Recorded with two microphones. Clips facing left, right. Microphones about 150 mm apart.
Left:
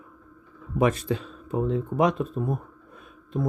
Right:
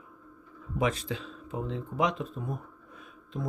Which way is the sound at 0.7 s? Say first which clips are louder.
Left 6 dB; 50° left (ahead or behind).